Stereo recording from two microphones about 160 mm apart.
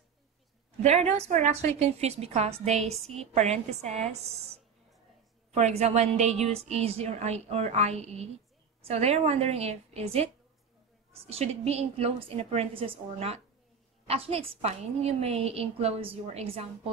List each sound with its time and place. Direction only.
0.8 s a woman's voice: 45° right (ahead or behind)